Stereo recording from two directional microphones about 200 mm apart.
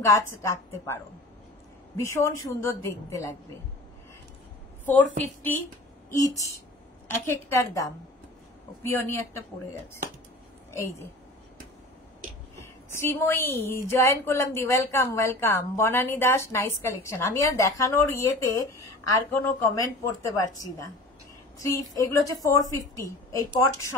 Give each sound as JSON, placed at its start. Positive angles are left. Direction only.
{"t": 0.0, "sound": "a woman's voice", "side_deg": 15}
{"t": 2.0, "sound": "a woman's voice", "side_deg": 15}
{"t": 4.8, "sound": "a woman's voice", "side_deg": 10}
{"t": 10.7, "sound": "a woman's voice", "side_deg": 15}
{"t": 12.5, "sound": "a woman's voice", "side_deg": 15}
{"t": 20.2, "sound": "a woman's voice", "side_deg": 15}